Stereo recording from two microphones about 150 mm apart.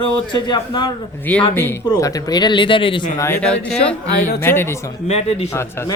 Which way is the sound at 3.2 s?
15° left (ahead or behind).